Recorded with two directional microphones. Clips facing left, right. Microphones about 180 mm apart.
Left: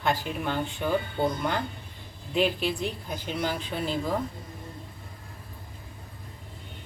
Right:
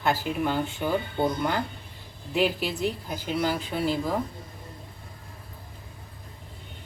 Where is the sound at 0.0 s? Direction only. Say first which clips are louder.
Right 2 dB; 5° right (ahead or behind).